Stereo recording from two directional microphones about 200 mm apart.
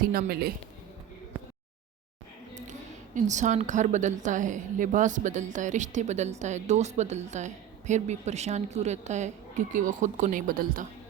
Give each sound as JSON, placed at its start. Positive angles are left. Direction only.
{"t": 0.1, "sound": "speech", "side_deg": -50}
{"t": 3.2, "sound": "a woman's voice", "side_deg": -35}